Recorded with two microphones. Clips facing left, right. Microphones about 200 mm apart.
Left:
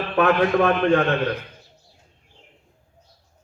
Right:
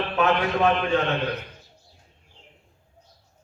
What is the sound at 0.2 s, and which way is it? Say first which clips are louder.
Speech: left 4 dB; 55° left (ahead or behind).